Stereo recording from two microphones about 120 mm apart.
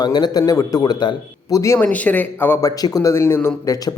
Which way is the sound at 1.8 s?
10° left (ahead or behind).